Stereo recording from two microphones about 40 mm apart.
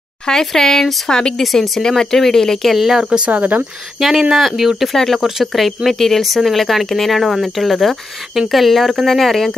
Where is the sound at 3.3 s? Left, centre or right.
Right.